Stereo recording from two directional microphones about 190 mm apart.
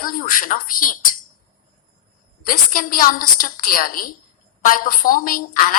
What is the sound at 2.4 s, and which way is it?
A woman's voice, 45° left (ahead or behind).